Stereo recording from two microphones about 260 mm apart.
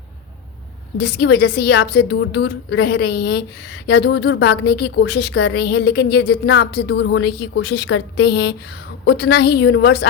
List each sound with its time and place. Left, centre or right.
0.9 s a woman's voice: left